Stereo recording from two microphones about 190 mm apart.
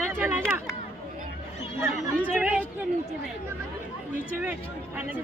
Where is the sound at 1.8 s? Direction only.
10° right (ahead or behind).